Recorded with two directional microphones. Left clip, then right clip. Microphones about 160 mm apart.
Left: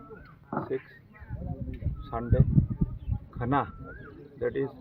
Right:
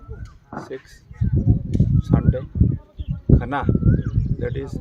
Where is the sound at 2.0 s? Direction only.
10° right (ahead or behind).